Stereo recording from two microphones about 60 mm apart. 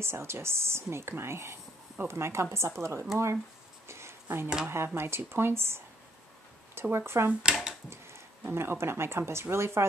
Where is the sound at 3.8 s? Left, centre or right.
Right.